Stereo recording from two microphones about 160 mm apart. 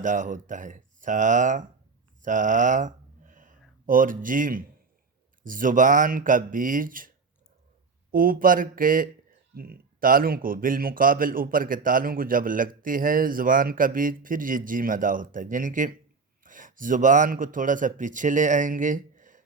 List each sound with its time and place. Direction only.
0.0 s a man's voice: 55° right (ahead or behind)
8.1 s a man's voice: 60° right (ahead or behind)